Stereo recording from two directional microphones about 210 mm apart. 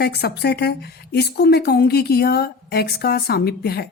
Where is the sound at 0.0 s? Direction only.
50° left (ahead or behind).